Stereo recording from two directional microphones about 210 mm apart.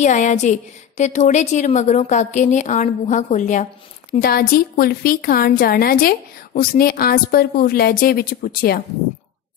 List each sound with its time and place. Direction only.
0.0 s a woman's voice: 35° left (ahead or behind)